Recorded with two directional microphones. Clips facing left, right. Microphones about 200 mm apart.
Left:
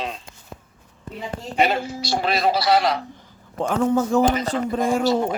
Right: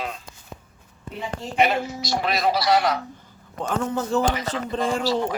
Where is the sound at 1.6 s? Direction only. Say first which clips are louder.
Left 1 dB; 30° left (ahead or behind).